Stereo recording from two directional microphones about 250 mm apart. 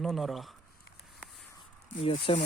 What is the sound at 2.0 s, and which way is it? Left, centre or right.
Speech, left.